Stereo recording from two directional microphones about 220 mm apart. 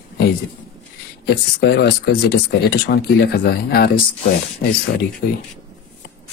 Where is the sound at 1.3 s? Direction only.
45° left (ahead or behind).